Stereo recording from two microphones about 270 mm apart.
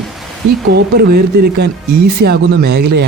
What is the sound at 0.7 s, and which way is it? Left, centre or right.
Speech, right.